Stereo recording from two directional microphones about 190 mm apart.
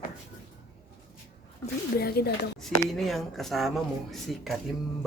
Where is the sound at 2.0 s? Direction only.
55° left (ahead or behind).